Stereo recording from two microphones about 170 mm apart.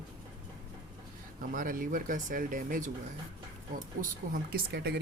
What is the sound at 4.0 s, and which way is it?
Speech, 60° right (ahead or behind).